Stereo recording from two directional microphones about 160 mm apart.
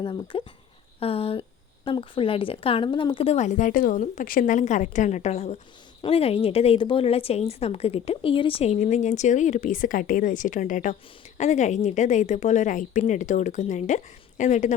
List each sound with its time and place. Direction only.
0.0 s a woman's voice: 30° left (ahead or behind); by 14.7 s 50° left (ahead or behind)